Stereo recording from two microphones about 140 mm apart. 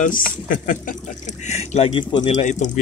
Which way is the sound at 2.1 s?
60° left (ahead or behind).